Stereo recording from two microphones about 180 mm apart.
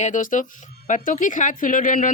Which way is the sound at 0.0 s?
45° left (ahead or behind).